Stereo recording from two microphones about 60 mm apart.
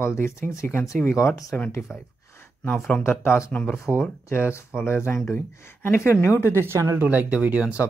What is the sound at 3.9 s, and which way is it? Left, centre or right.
Speech, right.